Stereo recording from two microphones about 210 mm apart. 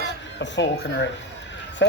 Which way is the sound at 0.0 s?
60° left (ahead or behind).